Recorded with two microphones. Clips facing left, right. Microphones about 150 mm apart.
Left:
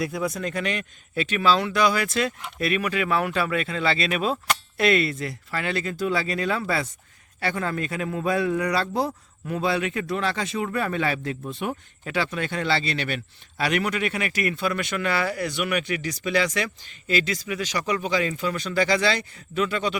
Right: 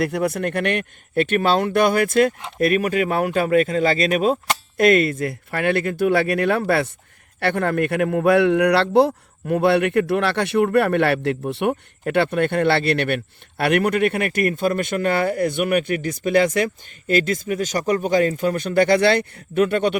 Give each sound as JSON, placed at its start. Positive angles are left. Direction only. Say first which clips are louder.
{"t": 0.0, "sound": "a man's voice", "louder": "right 6 dB", "side_deg": -65}
{"t": 12.0, "sound": "speech", "louder": "right 8 dB", "side_deg": -55}